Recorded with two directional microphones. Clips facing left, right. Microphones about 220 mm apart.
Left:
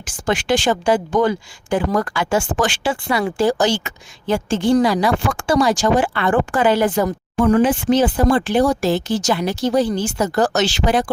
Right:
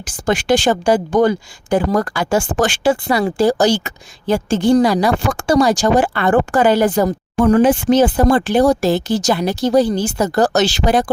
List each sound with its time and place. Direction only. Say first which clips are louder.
0.0 s speech: right 3 dB; 40° right (ahead or behind)